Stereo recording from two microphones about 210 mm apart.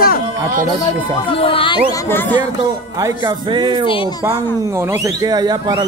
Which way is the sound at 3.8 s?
25° left (ahead or behind).